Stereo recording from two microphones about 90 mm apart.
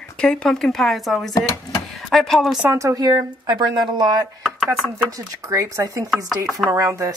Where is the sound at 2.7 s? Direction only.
40° right (ahead or behind).